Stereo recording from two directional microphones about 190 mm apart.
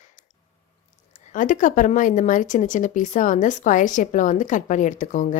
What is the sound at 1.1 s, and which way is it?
A woman's voice, 40° left (ahead or behind).